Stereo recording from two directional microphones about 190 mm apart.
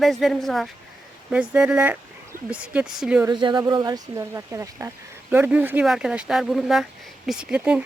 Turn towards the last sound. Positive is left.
turn(degrees=-5)  # may be behind; listen again after turning